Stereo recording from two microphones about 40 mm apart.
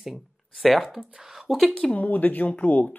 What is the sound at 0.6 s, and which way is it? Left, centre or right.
Speech, centre.